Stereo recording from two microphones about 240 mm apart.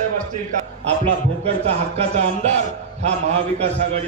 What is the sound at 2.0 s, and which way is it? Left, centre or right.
A man's voice, right.